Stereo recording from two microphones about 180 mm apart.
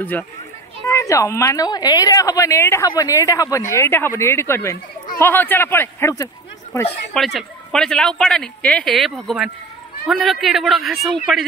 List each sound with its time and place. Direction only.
0.8 s a woman's voice: 15° left (ahead or behind)
7.2 s speech: centre (ahead or behind)